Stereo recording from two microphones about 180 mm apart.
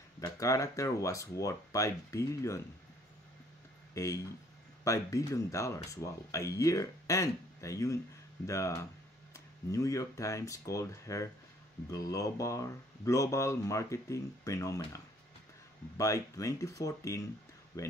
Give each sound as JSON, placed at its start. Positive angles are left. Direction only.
{"t": 0.2, "sound": "speech", "side_deg": 20}
{"t": 3.9, "sound": "speech", "side_deg": 20}
{"t": 16.0, "sound": "speech", "side_deg": 20}